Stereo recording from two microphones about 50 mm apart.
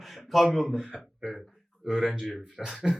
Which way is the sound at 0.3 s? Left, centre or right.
Centre.